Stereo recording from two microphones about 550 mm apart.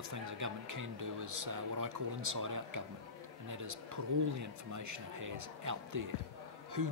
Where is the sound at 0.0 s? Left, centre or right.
Right.